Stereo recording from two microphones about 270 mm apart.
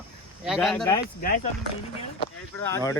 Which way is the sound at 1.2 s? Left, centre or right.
Left.